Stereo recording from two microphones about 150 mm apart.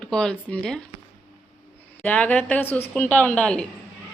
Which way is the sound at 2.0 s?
10° left (ahead or behind).